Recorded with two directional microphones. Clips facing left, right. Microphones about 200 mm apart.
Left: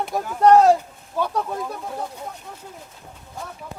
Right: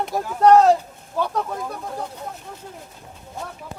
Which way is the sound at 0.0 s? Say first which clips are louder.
Even; centre (ahead or behind).